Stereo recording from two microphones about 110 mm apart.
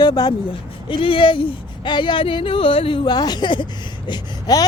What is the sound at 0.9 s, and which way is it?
Speech, 55° left (ahead or behind).